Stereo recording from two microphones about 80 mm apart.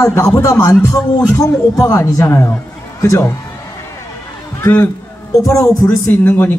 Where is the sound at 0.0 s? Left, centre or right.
Left.